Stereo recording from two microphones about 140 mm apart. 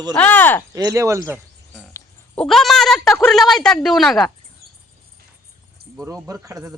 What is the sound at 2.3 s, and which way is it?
Cutlery, centre (ahead or behind).